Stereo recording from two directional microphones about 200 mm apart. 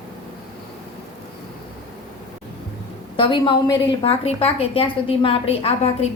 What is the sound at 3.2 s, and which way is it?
A woman's voice, 25° left (ahead or behind).